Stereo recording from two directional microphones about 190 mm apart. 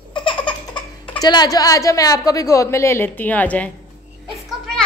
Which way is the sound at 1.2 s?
20° left (ahead or behind).